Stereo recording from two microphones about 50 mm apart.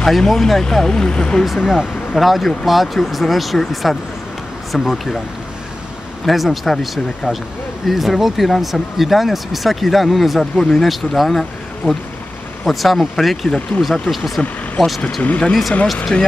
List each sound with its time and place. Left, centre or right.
0.0 s speech: centre
1.4 s speech: centre
6.2 s speech: centre
15.2 s speech: left